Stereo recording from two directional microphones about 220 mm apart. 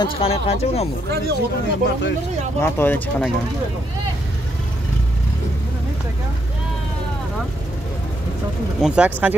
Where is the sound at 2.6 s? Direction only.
10° left (ahead or behind).